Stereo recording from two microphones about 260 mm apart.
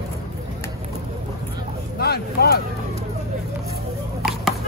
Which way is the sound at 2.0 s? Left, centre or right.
Left.